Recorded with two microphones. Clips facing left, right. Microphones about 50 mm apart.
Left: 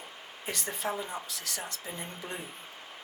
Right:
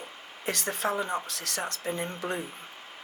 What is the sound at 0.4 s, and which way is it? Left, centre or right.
Speech, right.